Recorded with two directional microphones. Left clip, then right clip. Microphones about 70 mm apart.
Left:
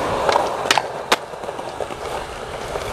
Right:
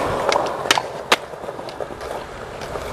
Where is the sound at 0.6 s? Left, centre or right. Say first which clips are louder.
Left 1 dB; centre.